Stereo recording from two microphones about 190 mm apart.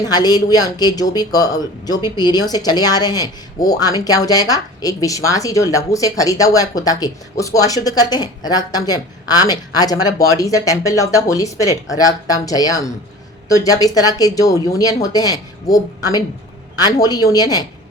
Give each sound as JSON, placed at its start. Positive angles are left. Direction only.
{"t": 0.1, "sound": "speech", "side_deg": 20}